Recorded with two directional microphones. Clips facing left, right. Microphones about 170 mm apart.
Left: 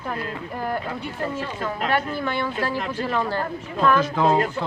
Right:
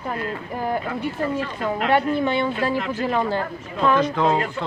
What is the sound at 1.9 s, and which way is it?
Speech, 20° right (ahead or behind).